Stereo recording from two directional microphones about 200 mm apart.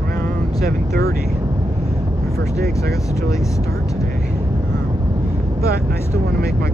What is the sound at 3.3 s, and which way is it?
Speech, centre (ahead or behind).